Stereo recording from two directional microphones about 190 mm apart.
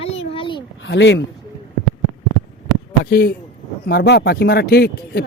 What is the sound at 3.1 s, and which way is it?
Speech, 55° left (ahead or behind).